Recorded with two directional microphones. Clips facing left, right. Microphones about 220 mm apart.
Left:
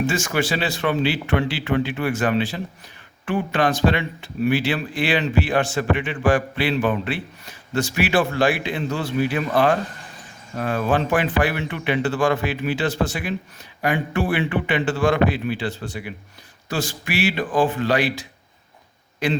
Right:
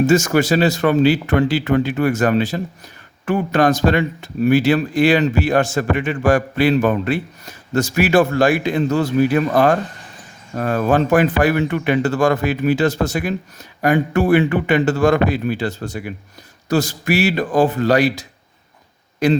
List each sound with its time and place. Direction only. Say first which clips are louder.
0.0 s speech: right 8 dB; 40° right (ahead or behind)